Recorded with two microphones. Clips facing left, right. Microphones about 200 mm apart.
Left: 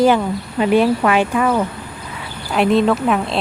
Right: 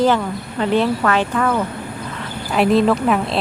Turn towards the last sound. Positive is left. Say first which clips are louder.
# even
turn(degrees=0)  # may be behind; listen again after turning